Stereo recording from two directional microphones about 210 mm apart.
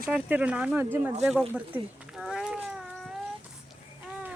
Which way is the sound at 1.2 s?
5° right (ahead or behind).